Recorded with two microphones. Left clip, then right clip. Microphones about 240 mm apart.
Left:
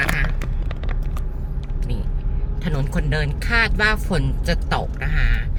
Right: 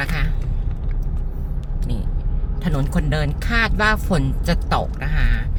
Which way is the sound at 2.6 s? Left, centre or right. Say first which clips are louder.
Right 2 dB; centre.